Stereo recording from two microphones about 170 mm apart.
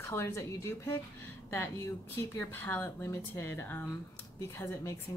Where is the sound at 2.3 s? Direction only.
15° left (ahead or behind).